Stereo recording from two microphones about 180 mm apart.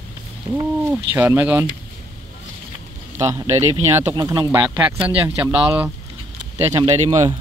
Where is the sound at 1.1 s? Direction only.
10° right (ahead or behind).